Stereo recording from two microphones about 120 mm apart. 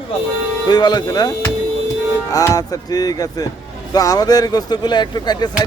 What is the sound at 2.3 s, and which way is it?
Speech, 30° left (ahead or behind).